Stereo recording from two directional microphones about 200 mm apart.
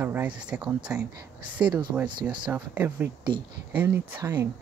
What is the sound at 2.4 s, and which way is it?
Speech, 10° right (ahead or behind).